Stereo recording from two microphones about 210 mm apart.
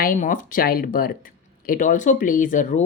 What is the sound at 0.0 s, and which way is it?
A woman's voice, 40° left (ahead or behind).